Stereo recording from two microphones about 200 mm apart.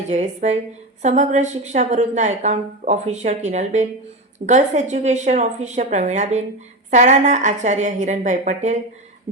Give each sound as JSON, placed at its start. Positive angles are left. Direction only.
{"t": 0.1, "sound": "a woman's voice", "side_deg": -35}